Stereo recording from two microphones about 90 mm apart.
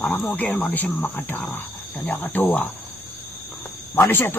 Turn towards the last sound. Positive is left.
turn(degrees=25)  # may be behind; listen again after turning